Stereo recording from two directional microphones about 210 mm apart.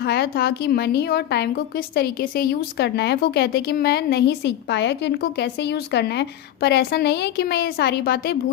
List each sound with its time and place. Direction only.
0.0 s a woman's voice: 50° left (ahead or behind)